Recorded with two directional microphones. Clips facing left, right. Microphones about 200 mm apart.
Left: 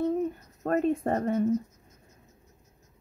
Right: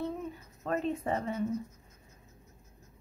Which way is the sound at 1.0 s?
50° left (ahead or behind).